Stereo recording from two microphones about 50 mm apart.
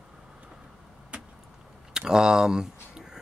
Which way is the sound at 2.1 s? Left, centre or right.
Centre.